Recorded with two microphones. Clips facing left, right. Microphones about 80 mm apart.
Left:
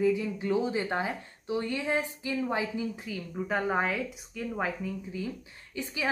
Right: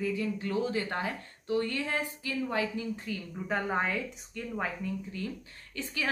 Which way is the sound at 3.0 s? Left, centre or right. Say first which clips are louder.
Left 2 dB; centre.